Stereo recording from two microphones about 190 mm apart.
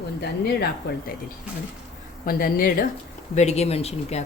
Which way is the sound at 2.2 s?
50° left (ahead or behind).